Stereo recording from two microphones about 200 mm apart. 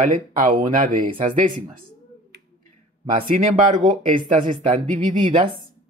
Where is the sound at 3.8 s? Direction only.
40° right (ahead or behind).